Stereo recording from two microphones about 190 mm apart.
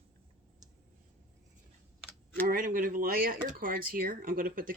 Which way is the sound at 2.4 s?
45° right (ahead or behind).